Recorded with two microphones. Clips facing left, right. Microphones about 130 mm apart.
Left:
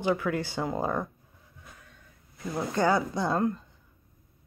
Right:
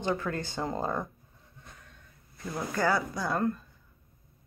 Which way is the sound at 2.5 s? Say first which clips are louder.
Left 3 dB; 20° left (ahead or behind).